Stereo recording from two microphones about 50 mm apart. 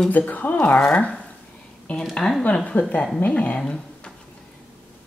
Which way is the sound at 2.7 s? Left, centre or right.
Left.